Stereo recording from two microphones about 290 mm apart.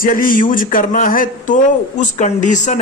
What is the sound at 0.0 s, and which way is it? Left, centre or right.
A man's voice, left.